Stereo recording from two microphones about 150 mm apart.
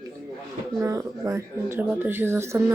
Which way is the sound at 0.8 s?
20° right (ahead or behind).